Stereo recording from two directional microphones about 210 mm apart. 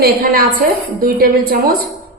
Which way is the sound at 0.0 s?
45° right (ahead or behind).